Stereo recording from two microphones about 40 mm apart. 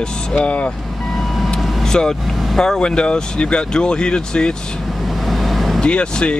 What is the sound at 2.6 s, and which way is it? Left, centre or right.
Speech, centre.